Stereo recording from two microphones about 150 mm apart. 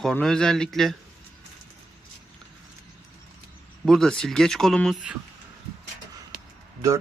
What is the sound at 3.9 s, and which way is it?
Speech, 5° left (ahead or behind).